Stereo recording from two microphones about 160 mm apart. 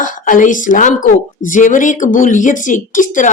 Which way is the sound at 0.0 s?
55° left (ahead or behind).